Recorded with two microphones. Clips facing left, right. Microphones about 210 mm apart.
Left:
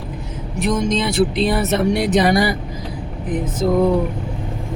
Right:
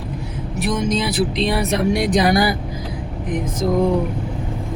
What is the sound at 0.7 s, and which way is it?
Speech, 5° right (ahead or behind).